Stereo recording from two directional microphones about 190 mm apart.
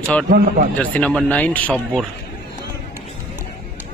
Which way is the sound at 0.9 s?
5° left (ahead or behind).